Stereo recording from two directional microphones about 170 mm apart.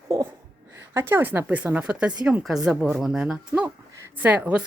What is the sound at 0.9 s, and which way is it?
Speech, 15° right (ahead or behind).